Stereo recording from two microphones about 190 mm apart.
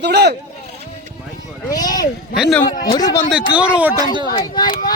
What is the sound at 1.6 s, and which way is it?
Speech, 20° left (ahead or behind).